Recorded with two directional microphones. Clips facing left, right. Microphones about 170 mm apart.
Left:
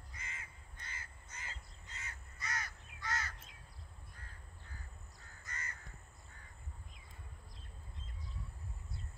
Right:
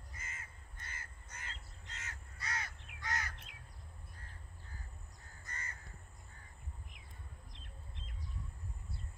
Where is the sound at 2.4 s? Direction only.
30° right (ahead or behind).